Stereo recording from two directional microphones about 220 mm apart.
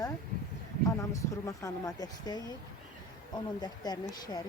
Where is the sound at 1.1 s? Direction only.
15° left (ahead or behind).